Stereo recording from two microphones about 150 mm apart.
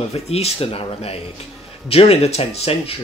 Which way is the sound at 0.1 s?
45° left (ahead or behind).